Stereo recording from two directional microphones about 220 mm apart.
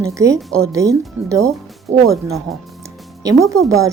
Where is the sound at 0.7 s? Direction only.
15° right (ahead or behind).